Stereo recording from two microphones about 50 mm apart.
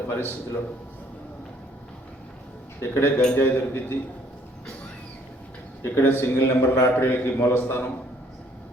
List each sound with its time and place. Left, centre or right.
0.1 s a man's voice: left
2.8 s a man's voice: left
5.8 s a man's voice: left
6.3 s a man's voice: left
6.9 s a man's voice: left